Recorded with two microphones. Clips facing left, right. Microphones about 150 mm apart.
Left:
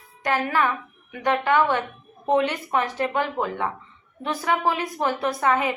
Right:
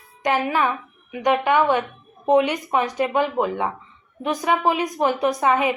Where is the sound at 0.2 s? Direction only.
20° right (ahead or behind).